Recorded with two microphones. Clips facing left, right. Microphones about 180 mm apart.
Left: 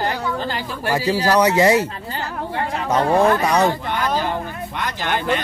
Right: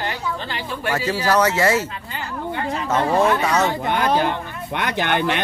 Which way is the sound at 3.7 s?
55° right (ahead or behind).